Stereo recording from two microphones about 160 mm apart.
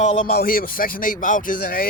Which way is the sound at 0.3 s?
65° left (ahead or behind).